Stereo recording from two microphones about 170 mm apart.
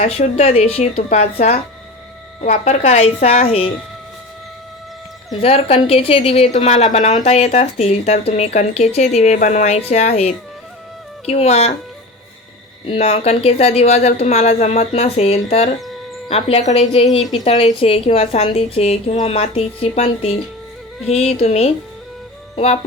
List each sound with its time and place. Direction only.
0.0 s a woman's voice: 40° left (ahead or behind)
5.4 s a woman's voice: 35° left (ahead or behind)
12.9 s a woman's voice: 35° left (ahead or behind)
21.3 s a woman's voice: 40° left (ahead or behind)